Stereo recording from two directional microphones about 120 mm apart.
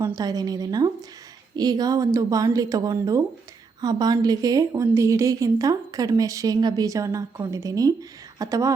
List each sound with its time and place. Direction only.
0.0 s a woman's voice: 30° right (ahead or behind)